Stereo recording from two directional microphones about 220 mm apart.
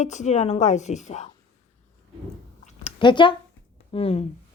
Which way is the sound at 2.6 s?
30° left (ahead or behind).